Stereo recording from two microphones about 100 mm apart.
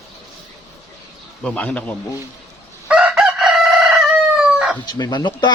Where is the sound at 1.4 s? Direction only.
15° left (ahead or behind).